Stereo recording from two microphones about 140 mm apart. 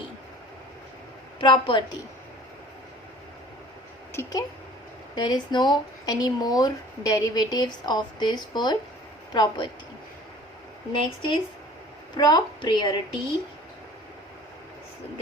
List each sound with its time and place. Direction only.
1.4 s a woman's voice: 35° left (ahead or behind)
4.1 s a woman's voice: 20° left (ahead or behind)
10.9 s a woman's voice: 35° left (ahead or behind)